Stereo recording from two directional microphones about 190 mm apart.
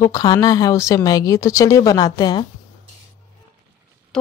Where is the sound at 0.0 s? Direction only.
20° left (ahead or behind).